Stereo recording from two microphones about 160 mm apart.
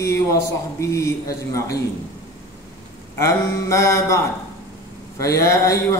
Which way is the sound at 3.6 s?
20° left (ahead or behind).